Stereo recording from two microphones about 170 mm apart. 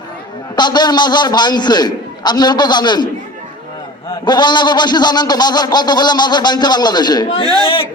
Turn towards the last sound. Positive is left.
turn(degrees=30)  # may be behind; listen again after turning